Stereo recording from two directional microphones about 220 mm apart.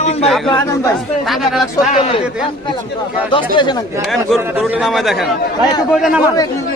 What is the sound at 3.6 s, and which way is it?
Speech, 20° left (ahead or behind).